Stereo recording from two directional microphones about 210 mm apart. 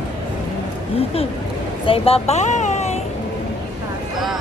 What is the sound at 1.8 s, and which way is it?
Speech, 25° left (ahead or behind).